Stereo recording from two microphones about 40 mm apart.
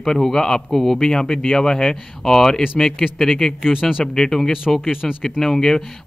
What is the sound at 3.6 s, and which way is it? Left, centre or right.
Speech, centre.